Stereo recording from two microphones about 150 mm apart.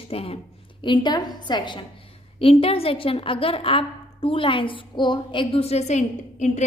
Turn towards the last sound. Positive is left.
turn(degrees=50)  # may be behind; listen again after turning